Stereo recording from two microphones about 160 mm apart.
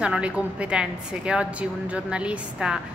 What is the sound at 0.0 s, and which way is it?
A woman's voice, 5° right (ahead or behind).